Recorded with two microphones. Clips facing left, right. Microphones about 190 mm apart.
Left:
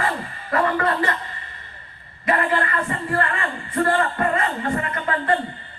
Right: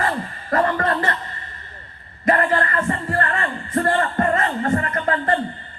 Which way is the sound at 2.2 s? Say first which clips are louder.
Right 3 dB; 40° right (ahead or behind).